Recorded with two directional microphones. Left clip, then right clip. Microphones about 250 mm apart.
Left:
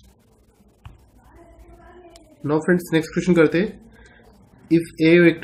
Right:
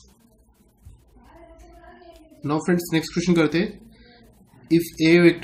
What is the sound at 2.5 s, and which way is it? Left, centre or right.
Speech, centre.